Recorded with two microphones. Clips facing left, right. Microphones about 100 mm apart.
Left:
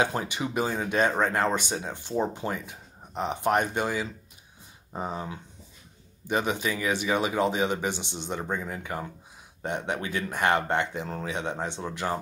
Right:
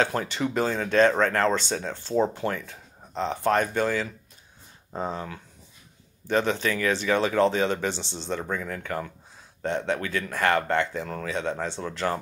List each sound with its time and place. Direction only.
0.0 s speech: 15° left (ahead or behind)